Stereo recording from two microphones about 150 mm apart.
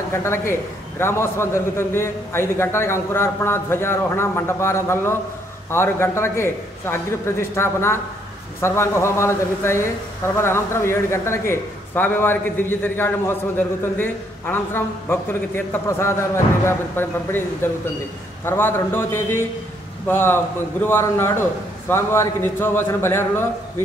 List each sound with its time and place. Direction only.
0.1 s a man's voice: 15° left (ahead or behind)